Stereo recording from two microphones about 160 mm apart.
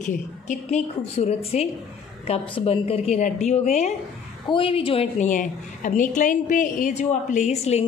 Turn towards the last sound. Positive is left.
turn(degrees=40)  # may be behind; listen again after turning